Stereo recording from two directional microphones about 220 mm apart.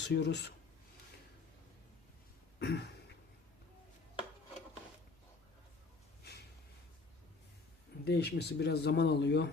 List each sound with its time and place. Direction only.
0.0 s speech: 50° left (ahead or behind)
2.6 s a sound: 50° left (ahead or behind)
8.0 s speech: 50° left (ahead or behind)